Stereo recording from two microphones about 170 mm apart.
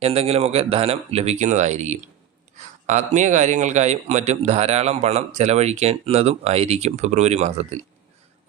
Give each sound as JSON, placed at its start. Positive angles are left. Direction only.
{"t": 0.0, "sound": "a man's voice", "side_deg": -35}